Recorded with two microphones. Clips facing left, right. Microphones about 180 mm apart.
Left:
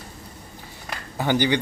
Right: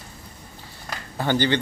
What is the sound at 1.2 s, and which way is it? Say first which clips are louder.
Speech: left 1 dB; 15° left (ahead or behind).